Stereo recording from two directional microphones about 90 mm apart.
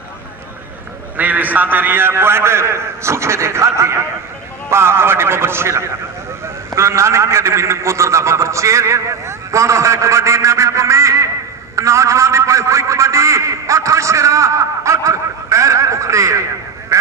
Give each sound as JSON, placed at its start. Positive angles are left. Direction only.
{"t": 1.1, "sound": "a man's voice", "side_deg": -20}